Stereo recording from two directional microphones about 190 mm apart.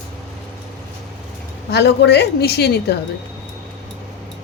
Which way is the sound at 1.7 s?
60° left (ahead or behind).